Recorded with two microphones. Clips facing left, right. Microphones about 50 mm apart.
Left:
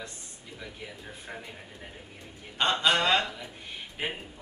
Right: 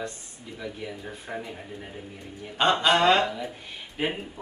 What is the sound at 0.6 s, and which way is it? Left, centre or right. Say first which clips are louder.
Speech: right 7 dB; centre.